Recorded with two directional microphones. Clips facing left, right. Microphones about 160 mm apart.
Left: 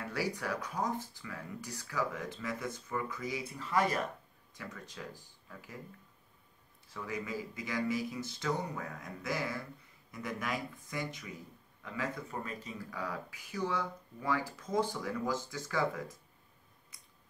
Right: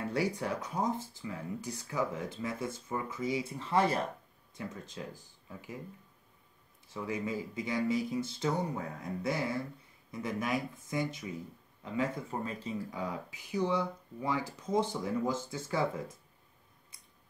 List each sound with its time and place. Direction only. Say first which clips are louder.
0.0 s speech: right 4 dB; 25° right (ahead or behind)
6.9 s speech: right 4 dB; 25° right (ahead or behind)